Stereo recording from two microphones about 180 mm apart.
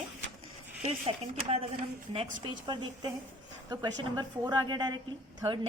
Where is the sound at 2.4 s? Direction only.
25° right (ahead or behind).